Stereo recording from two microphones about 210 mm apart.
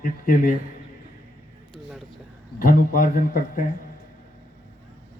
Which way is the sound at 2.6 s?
40° left (ahead or behind).